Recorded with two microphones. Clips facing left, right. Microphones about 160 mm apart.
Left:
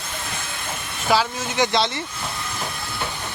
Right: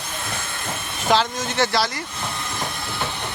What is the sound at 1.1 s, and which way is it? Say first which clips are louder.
Speech: even; 10° left (ahead or behind).